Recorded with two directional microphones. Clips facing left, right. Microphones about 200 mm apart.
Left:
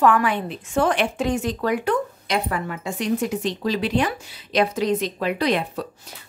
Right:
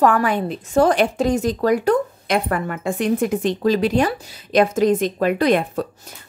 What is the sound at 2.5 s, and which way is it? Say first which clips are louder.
Speech: right 5 dB; 50° right (ahead or behind).